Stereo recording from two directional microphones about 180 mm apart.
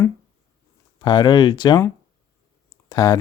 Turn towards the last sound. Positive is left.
turn(degrees=20)  # may be behind; listen again after turning